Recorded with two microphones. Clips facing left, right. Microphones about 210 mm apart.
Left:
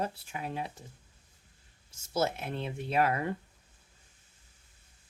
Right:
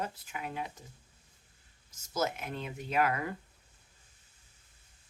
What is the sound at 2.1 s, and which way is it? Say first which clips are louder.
Speech: left 3 dB; 30° left (ahead or behind).